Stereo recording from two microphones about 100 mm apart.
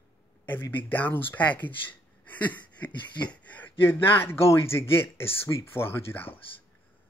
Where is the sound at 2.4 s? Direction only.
15° left (ahead or behind).